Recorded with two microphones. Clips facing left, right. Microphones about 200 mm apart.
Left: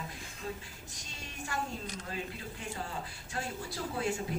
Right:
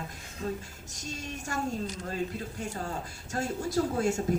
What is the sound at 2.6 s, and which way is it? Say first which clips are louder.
A woman's voice: right 3 dB; 45° right (ahead or behind).